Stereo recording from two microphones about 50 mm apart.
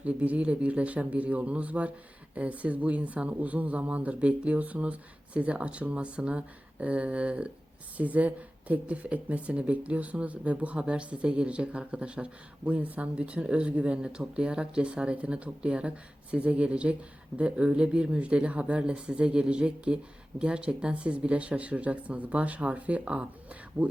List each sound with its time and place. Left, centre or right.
0.0 s speech: right